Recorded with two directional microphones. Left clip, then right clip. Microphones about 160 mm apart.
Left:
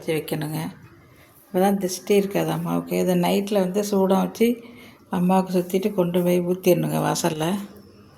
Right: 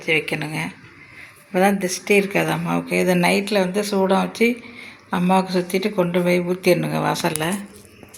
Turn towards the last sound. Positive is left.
turn(degrees=15)  # may be behind; listen again after turning